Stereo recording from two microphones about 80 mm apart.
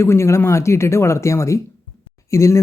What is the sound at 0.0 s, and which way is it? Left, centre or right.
Speech, left.